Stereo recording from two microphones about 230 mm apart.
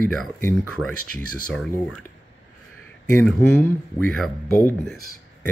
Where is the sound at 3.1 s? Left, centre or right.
Centre.